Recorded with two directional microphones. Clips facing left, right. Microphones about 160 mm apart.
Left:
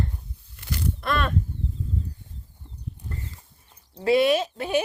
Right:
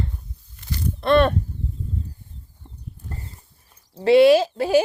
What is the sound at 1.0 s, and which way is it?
Speech, 35° right (ahead or behind).